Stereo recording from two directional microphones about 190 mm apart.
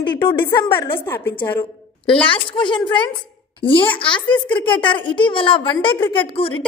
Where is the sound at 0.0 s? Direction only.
25° left (ahead or behind).